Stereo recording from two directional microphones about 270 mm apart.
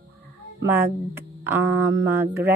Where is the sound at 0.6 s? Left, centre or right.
Centre.